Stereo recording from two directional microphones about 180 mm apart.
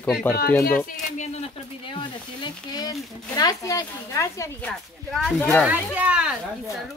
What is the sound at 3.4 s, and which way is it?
Speech, 20° left (ahead or behind).